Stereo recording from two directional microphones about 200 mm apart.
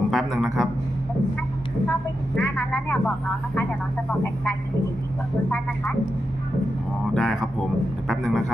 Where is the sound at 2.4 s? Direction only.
10° left (ahead or behind).